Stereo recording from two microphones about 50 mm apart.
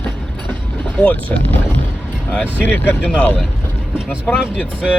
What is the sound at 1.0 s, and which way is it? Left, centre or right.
Speech, left.